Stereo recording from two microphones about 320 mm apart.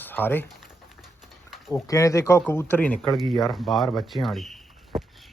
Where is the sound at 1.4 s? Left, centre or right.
Centre.